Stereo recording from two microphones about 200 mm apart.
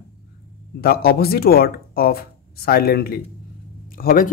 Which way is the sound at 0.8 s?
50° left (ahead or behind).